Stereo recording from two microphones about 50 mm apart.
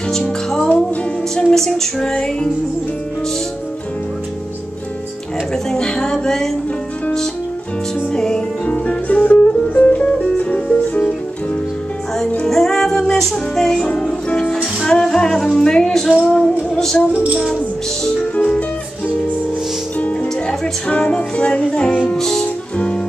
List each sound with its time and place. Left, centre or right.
0.7 s music: centre
5.5 s music: centre
8.1 s music: centre
8.6 s music: left
12.4 s music: centre
18.3 s music: left
20.4 s music: centre
22.1 s music: centre
22.4 s music: left